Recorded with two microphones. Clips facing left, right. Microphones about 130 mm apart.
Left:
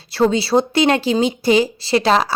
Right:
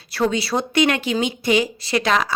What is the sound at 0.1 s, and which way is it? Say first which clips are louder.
A man's voice: left 5 dB; 30° left (ahead or behind).